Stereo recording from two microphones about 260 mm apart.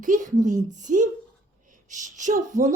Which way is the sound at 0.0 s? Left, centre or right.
Right.